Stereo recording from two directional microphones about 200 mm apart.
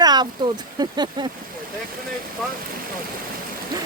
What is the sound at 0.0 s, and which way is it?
Speech, 20° right (ahead or behind).